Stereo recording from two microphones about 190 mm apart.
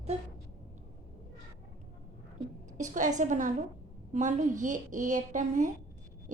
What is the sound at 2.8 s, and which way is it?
A woman's voice, 40° right (ahead or behind).